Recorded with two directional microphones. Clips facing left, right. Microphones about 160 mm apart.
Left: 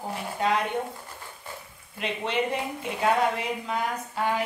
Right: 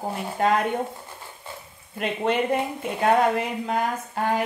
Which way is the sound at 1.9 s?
50° right (ahead or behind).